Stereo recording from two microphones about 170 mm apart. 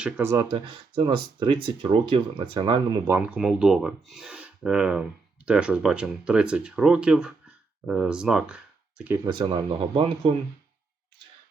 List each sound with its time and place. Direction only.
0.0 s speech: 15° right (ahead or behind)
0.5 s speech: 30° right (ahead or behind)
3.1 s speech: 5° right (ahead or behind)
9.4 s speech: 30° right (ahead or behind)